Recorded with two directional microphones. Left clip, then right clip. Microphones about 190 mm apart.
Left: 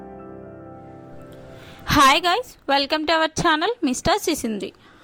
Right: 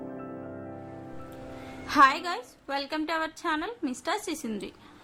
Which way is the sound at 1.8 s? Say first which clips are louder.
Left 6 dB; 45° left (ahead or behind).